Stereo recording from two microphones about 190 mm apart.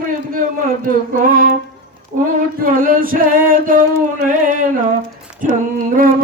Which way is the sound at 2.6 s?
50° right (ahead or behind).